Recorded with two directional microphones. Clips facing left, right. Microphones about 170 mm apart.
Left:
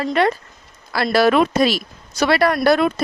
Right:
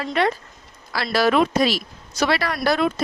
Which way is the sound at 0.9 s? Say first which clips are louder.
Left 4 dB; 55° left (ahead or behind).